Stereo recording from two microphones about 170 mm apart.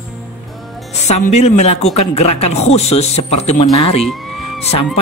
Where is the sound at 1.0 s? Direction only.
40° left (ahead or behind).